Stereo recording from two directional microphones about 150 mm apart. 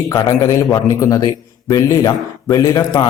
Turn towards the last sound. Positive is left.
turn(degrees=25)  # may be behind; listen again after turning